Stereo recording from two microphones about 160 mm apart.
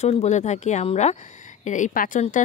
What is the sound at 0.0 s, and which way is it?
Speech, 45° left (ahead or behind).